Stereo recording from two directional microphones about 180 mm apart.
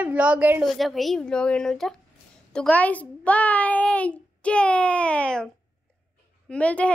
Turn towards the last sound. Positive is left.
turn(degrees=5)  # may be behind; listen again after turning